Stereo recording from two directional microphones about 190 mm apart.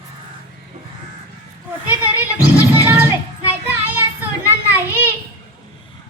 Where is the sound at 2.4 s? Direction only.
10° right (ahead or behind).